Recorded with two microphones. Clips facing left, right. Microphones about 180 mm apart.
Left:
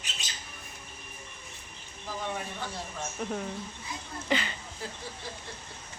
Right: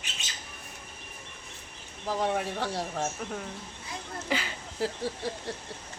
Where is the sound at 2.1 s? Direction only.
70° right (ahead or behind).